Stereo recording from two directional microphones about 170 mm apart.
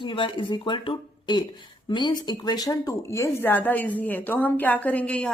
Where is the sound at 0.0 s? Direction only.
30° left (ahead or behind).